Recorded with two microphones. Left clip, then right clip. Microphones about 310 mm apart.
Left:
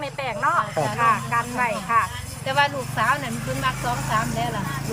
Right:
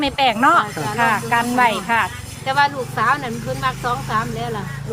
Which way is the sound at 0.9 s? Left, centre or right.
Right.